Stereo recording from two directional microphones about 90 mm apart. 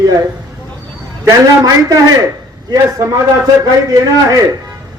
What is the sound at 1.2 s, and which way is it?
Speech, 40° right (ahead or behind).